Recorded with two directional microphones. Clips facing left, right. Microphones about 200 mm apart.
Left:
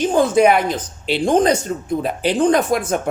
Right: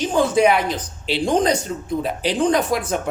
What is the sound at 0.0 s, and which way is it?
A woman's voice, 50° left (ahead or behind).